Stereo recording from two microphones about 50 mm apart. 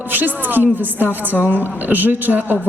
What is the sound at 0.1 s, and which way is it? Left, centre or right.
A woman's voice, right.